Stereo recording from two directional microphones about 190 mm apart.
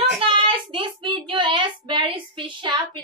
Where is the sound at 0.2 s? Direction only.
25° right (ahead or behind).